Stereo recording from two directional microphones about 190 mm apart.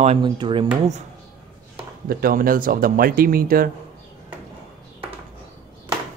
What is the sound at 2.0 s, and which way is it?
Speech, 50° right (ahead or behind).